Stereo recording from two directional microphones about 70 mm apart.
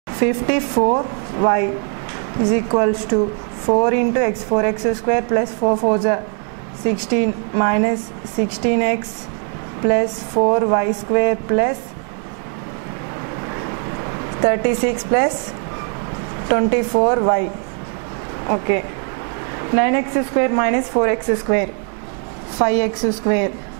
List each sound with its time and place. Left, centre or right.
0.2 s speech: centre
14.4 s speech: centre
16.4 s speech: centre
18.5 s speech: centre